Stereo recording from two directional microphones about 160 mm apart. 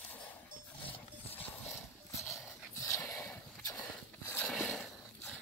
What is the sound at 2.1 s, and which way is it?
Horse, 20° left (ahead or behind).